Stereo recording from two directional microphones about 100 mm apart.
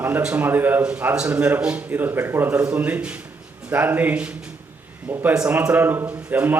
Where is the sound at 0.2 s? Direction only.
15° right (ahead or behind).